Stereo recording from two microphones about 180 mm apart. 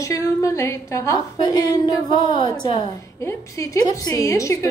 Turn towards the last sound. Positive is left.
turn(degrees=15)  # may be behind; listen again after turning